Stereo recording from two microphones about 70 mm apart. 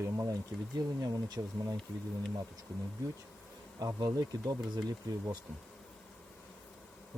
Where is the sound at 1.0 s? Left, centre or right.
Right.